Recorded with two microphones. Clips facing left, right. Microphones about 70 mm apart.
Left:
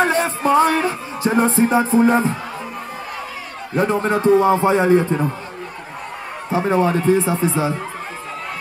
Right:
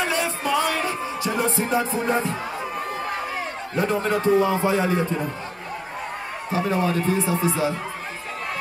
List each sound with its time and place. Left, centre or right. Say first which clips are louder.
0.0 s music: left 7 dB; left
3.7 s a man's voice: left 5 dB; left
6.5 s a man's voice: left 5 dB; left